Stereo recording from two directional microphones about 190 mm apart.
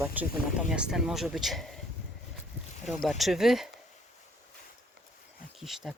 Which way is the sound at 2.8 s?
Centre (ahead or behind).